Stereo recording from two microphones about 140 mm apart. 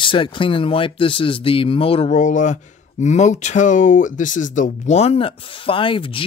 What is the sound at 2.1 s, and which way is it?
Speech, 65° left (ahead or behind).